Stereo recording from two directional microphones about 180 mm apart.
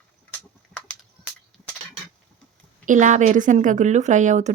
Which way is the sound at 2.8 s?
45° right (ahead or behind).